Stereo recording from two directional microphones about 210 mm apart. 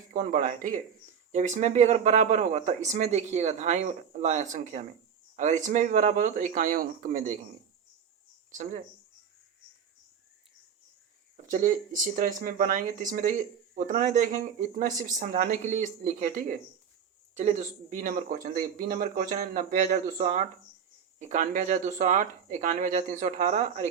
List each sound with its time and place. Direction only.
0.1 s speech: 40° right (ahead or behind)
11.4 s speech: 35° right (ahead or behind)